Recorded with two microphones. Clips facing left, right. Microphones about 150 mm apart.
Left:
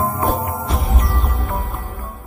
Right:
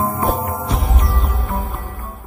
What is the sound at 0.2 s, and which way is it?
Music, centre (ahead or behind).